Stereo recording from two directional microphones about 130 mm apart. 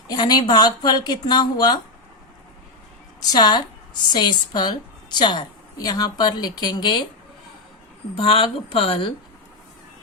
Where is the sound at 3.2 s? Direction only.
30° left (ahead or behind).